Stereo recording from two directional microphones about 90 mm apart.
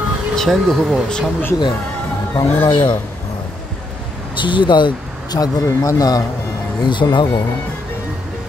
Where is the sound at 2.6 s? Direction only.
65° left (ahead or behind).